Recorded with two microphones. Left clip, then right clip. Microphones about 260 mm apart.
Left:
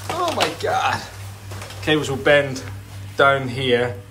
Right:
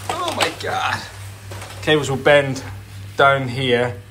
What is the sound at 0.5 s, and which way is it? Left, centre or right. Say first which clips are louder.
A man's voice: left 1 dB; centre.